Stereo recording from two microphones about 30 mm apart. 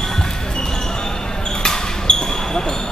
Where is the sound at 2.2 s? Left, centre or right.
Left.